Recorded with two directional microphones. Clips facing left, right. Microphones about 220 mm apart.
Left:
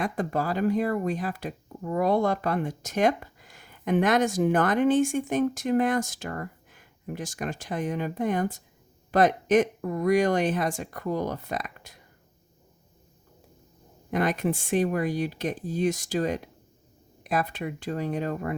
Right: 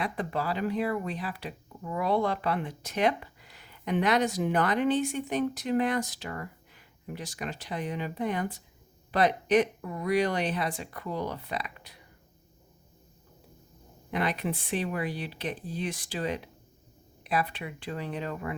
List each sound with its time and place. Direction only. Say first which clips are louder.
0.0 s speech: left 4 dB; 45° left (ahead or behind)
14.1 s speech: left 5 dB; 45° left (ahead or behind)